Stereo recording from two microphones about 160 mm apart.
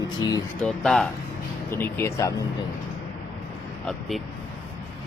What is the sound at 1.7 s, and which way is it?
Speech, 15° left (ahead or behind).